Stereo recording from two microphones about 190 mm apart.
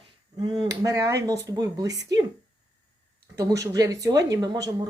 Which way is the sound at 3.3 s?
15° right (ahead or behind).